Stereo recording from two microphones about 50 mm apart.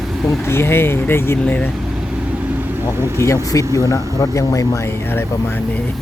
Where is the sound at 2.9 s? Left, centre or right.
Right.